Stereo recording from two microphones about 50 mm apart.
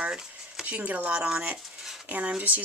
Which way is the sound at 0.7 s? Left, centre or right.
Right.